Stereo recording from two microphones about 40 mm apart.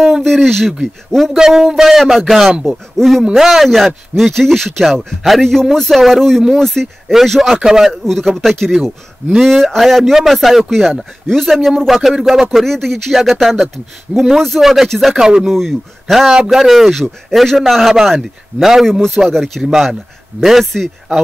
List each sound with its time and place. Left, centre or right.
0.2 s speech: centre
1.3 s speech: centre
2.0 s a man's voice: centre
7.6 s speech: centre
7.9 s a man's voice: centre
12.4 s a man's voice: centre
15.2 s speech: centre
15.5 s a man's voice: centre
19.6 s a man's voice: centre